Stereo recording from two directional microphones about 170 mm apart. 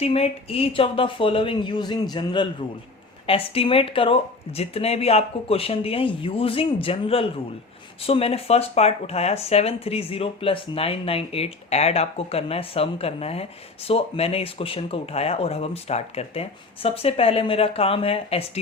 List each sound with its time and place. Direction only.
0.0 s speech: 35° left (ahead or behind)